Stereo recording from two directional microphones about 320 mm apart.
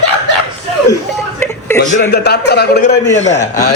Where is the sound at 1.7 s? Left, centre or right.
Left.